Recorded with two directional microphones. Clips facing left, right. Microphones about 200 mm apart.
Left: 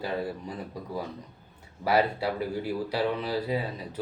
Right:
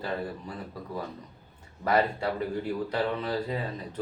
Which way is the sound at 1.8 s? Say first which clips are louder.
Left 1 dB; 10° left (ahead or behind).